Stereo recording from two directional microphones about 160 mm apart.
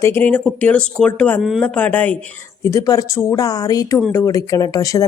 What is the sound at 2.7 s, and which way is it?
Speech, 20° left (ahead or behind).